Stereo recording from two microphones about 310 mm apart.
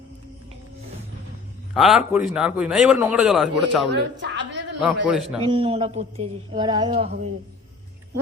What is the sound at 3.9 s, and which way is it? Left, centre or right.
Speech, right.